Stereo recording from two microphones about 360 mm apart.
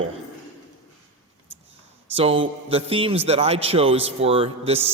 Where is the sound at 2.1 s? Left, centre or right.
Centre.